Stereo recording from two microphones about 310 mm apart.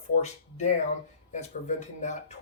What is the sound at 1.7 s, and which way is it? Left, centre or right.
Speech, left.